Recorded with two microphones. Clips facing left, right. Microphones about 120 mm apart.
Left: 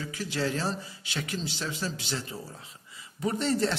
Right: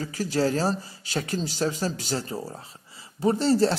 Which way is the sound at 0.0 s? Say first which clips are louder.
Right 6 dB; 40° right (ahead or behind).